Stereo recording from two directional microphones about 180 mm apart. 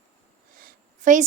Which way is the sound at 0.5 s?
50° right (ahead or behind).